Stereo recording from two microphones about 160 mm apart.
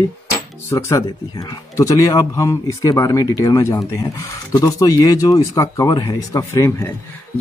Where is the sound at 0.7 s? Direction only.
20° left (ahead or behind).